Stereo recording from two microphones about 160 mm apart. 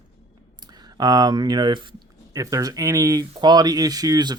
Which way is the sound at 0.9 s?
25° right (ahead or behind).